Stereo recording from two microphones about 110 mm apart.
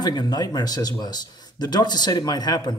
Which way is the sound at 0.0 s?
40° left (ahead or behind).